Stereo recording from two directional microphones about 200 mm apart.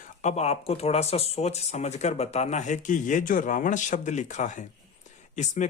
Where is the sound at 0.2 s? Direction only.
35° left (ahead or behind).